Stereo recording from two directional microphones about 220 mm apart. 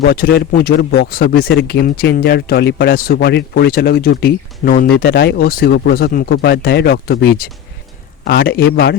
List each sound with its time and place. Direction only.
0.0 s speech: 45° left (ahead or behind)